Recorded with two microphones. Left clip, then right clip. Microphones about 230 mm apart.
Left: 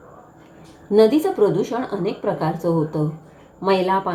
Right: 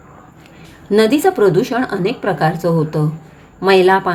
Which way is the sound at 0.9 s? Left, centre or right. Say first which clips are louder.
Right 3 dB; right.